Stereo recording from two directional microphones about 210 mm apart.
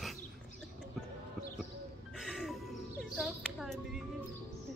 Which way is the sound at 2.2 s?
Centre (ahead or behind).